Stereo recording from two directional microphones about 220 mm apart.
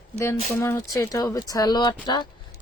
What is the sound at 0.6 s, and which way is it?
Speech, 15° left (ahead or behind).